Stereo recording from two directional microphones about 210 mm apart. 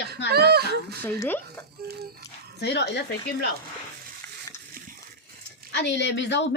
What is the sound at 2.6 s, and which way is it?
Speech, 50° left (ahead or behind).